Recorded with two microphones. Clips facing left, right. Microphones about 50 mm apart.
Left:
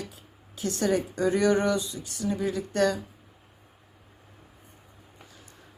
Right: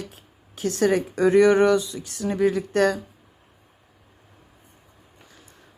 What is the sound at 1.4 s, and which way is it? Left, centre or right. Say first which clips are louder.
Speech: right 7 dB; right.